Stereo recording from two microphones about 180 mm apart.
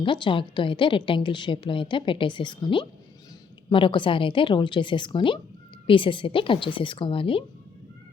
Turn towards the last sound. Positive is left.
turn(degrees=30)  # may be behind; listen again after turning